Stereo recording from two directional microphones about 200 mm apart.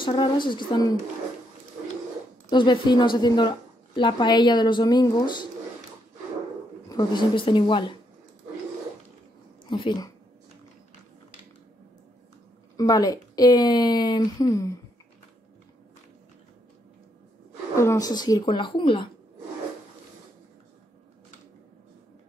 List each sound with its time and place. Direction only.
0.0 s a woman's voice: 25° left (ahead or behind)
2.5 s a woman's voice: 25° left (ahead or behind)
6.9 s a woman's voice: 20° left (ahead or behind)
9.7 s a woman's voice: 25° left (ahead or behind)
12.7 s a woman's voice: 20° left (ahead or behind)
17.7 s a woman's voice: 15° left (ahead or behind)